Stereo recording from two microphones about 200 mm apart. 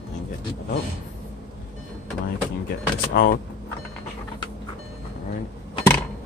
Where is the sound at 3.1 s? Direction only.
50° left (ahead or behind).